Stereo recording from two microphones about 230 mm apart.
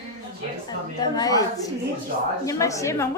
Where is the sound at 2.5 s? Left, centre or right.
Centre.